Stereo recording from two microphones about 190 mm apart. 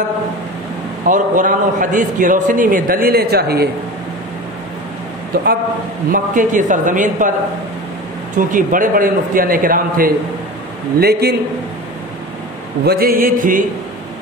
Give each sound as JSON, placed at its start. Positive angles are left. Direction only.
{"t": 1.0, "sound": "a man's voice", "side_deg": -45}
{"t": 5.3, "sound": "a man's voice", "side_deg": -50}
{"t": 8.4, "sound": "a man's voice", "side_deg": -45}
{"t": 12.8, "sound": "a man's voice", "side_deg": -50}